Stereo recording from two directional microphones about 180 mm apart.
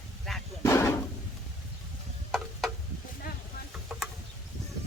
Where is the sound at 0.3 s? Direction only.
Centre (ahead or behind).